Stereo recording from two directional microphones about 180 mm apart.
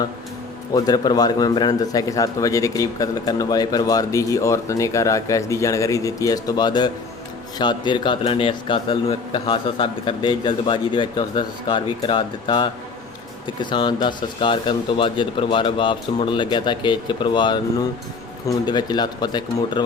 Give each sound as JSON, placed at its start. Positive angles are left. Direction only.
{"t": 0.7, "sound": "a man's voice", "side_deg": 20}